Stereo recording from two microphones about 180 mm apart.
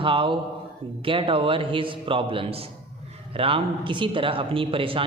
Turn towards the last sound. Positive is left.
turn(degrees=-30)  # may be behind; listen again after turning